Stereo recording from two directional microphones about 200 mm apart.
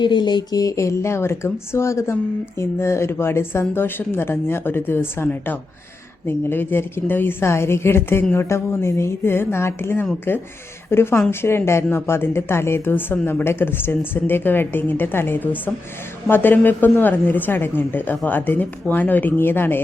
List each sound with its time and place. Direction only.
0.0 s speech: 20° left (ahead or behind)